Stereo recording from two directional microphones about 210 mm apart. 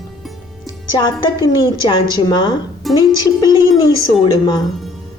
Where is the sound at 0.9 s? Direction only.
20° left (ahead or behind).